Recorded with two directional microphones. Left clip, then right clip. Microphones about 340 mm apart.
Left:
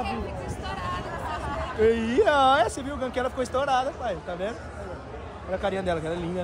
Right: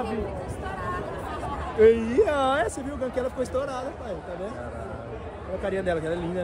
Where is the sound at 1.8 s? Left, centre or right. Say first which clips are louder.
Right 2 dB; centre.